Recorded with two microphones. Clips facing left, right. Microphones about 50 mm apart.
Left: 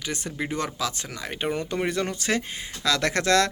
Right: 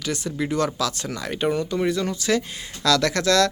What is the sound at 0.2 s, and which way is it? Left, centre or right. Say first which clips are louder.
Speech: right 4 dB; left.